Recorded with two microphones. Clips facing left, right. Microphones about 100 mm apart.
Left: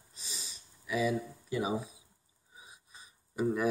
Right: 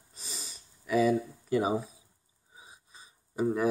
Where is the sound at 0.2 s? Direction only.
45° right (ahead or behind).